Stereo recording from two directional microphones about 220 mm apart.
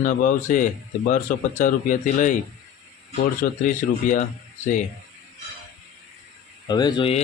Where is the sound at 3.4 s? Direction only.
35° left (ahead or behind).